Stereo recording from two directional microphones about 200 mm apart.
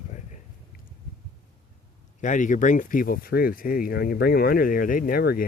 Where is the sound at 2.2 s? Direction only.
40° left (ahead or behind).